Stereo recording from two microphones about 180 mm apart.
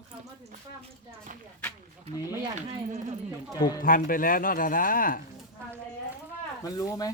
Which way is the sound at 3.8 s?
50° left (ahead or behind).